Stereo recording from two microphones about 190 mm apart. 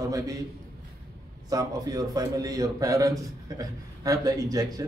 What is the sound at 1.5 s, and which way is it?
A man's voice, 20° right (ahead or behind).